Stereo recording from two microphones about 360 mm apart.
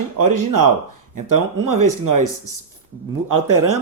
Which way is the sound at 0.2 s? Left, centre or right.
Right.